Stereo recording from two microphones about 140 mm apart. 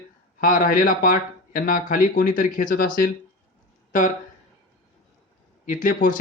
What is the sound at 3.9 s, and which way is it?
Speech, 70° left (ahead or behind).